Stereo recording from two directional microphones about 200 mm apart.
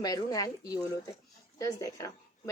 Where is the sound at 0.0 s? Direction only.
20° left (ahead or behind).